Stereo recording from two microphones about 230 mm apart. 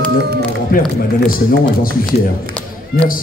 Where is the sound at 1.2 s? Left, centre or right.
Left.